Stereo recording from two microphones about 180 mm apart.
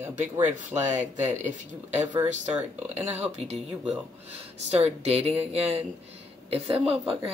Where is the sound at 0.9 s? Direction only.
40° right (ahead or behind).